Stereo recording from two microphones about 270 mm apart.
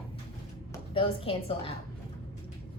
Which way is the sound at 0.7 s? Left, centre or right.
Centre.